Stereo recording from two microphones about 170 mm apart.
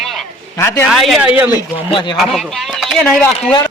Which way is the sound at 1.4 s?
15° right (ahead or behind).